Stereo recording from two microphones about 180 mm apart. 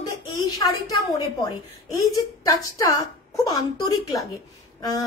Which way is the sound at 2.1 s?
20° left (ahead or behind).